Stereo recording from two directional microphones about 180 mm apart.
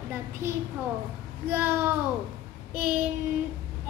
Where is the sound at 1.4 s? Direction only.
10° right (ahead or behind).